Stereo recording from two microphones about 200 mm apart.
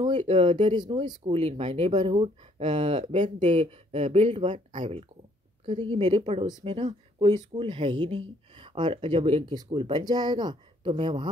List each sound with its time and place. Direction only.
0.0 s speech: 25° right (ahead or behind)
5.7 s speech: 25° right (ahead or behind)